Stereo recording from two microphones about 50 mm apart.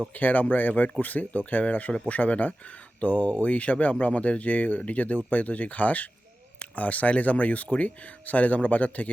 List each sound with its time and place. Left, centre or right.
0.1 s speech: left